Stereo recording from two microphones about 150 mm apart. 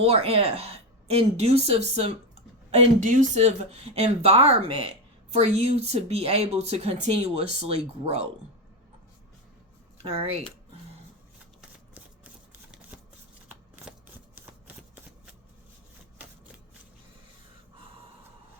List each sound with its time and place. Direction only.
0.0 s speech: 40° right (ahead or behind)
2.7 s speech: 60° right (ahead or behind)
10.0 s speech: 40° right (ahead or behind)